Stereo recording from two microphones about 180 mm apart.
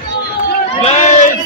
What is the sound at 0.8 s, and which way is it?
Crowd, 40° left (ahead or behind).